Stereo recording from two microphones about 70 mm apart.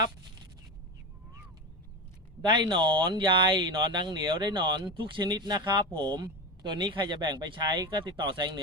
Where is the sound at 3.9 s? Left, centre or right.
Right.